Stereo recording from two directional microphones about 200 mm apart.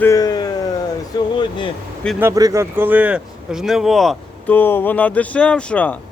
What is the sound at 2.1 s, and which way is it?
Speech, 15° right (ahead or behind).